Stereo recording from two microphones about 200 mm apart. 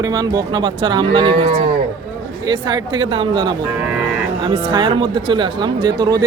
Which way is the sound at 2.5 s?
20° right (ahead or behind).